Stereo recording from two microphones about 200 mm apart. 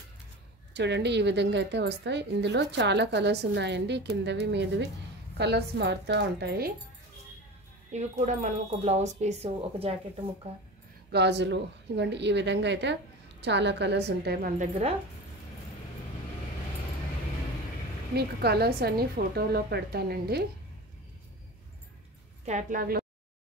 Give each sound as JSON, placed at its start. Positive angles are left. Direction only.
{"t": 0.7, "sound": "a woman's voice", "side_deg": -60}
{"t": 7.9, "sound": "speech", "side_deg": -35}
{"t": 11.1, "sound": "a woman's voice", "side_deg": -60}
{"t": 18.1, "sound": "a woman's voice", "side_deg": -55}
{"t": 22.4, "sound": "a woman's voice", "side_deg": -35}